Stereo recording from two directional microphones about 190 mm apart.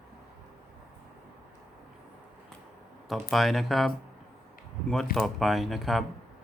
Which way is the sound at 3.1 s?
Centre (ahead or behind).